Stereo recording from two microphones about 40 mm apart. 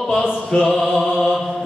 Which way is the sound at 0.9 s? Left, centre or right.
Centre.